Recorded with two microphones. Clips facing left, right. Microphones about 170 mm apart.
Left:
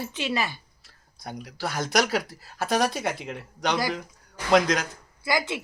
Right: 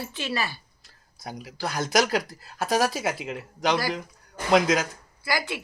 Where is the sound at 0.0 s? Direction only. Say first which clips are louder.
Left 2 dB; 20° left (ahead or behind).